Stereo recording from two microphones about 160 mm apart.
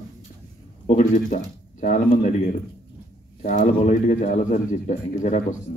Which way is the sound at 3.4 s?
50° left (ahead or behind).